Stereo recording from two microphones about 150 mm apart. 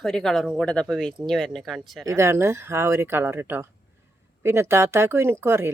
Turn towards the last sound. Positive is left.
turn(degrees=-15)  # may be behind; listen again after turning